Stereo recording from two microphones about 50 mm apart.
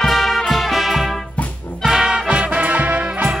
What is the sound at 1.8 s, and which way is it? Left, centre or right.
Music, centre.